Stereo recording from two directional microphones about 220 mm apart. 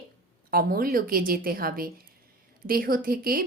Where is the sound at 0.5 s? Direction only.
45° right (ahead or behind).